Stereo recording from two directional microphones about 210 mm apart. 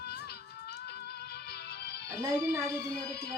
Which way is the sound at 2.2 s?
15° right (ahead or behind).